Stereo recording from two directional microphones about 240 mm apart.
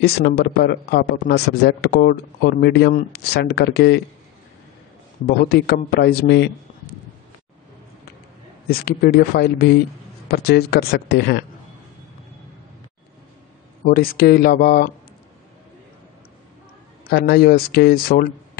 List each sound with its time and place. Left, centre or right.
0.0 s speech: left
5.2 s speech: left
8.6 s speech: left
13.8 s speech: left
17.0 s speech: left